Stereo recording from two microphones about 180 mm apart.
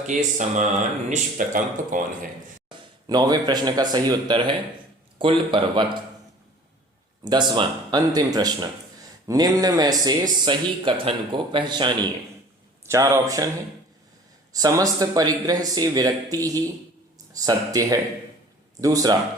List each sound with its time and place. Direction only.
0.1 s speech: 45° right (ahead or behind)
2.6 s speech: 25° right (ahead or behind)
7.3 s speech: 25° right (ahead or behind)
12.8 s speech: 15° right (ahead or behind)
14.5 s speech: 20° right (ahead or behind)